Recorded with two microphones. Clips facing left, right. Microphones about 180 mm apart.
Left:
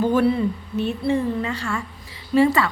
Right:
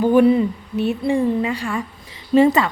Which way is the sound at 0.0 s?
15° right (ahead or behind).